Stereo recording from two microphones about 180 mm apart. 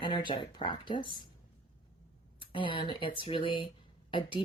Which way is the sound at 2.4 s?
30° left (ahead or behind).